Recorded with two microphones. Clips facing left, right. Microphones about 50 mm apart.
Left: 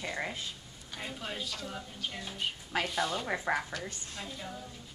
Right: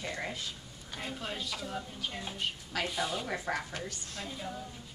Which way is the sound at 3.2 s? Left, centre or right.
Centre.